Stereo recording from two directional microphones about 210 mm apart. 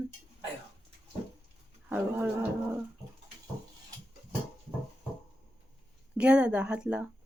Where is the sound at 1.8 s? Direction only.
5° right (ahead or behind).